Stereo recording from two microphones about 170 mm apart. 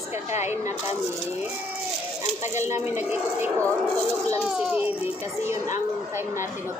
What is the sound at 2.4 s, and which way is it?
A woman's voice, 15° right (ahead or behind).